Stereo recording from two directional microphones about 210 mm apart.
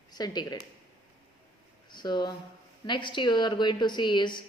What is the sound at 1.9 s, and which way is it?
A woman's voice, 20° left (ahead or behind).